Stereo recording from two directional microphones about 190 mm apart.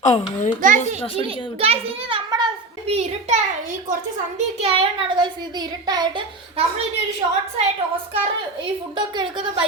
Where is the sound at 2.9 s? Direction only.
40° right (ahead or behind).